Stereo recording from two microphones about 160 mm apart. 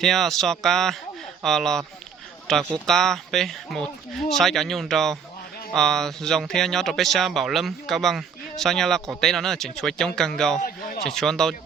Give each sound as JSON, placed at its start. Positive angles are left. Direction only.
{"t": 0.0, "sound": "speech", "side_deg": 0}
{"t": 10.6, "sound": "a sound", "side_deg": 70}
{"t": 11.0, "sound": "speech", "side_deg": 5}